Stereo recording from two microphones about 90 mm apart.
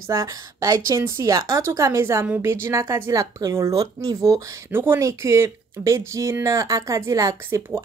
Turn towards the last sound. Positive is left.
turn(degrees=-35)  # may be behind; listen again after turning